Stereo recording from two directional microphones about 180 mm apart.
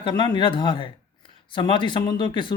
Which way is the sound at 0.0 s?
25° left (ahead or behind).